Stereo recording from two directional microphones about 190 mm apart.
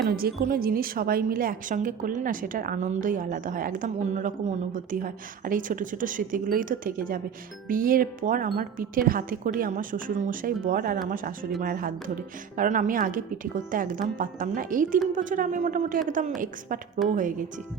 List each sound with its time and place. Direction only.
0.1 s a woman's voice: 50° right (ahead or behind)